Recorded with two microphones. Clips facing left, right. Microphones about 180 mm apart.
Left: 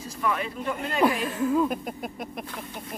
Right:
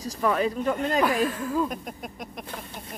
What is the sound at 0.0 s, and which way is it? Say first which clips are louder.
Speech: right 4 dB; 35° right (ahead or behind).